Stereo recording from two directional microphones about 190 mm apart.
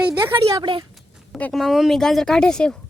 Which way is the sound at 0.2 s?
15° right (ahead or behind).